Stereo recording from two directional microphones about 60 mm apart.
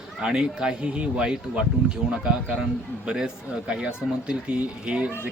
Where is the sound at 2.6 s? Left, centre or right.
Centre.